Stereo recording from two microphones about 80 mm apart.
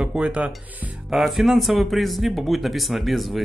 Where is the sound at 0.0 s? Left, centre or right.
Centre.